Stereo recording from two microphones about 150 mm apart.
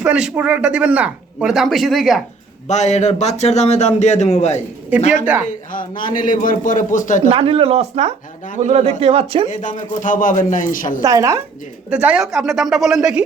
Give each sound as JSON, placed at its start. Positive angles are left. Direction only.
{"t": 0.0, "sound": "speech", "side_deg": -5}
{"t": 2.6, "sound": "a man's voice", "side_deg": 50}
{"t": 5.2, "sound": "speech", "side_deg": -10}
{"t": 5.5, "sound": "a man's voice", "side_deg": 65}
{"t": 7.3, "sound": "a man's voice", "side_deg": -40}
{"t": 9.5, "sound": "a man's voice", "side_deg": 55}
{"t": 11.0, "sound": "a woman's voice", "side_deg": -20}
{"t": 11.9, "sound": "a woman's voice", "side_deg": -10}